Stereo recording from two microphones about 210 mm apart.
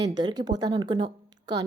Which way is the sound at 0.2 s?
20° right (ahead or behind).